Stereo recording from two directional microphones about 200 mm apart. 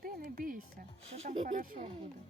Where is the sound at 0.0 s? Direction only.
45° right (ahead or behind).